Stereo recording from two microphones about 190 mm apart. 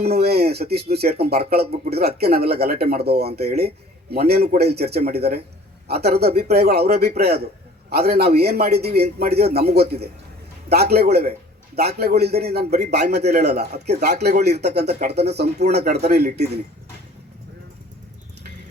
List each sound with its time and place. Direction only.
0.0 s speech: 55° right (ahead or behind)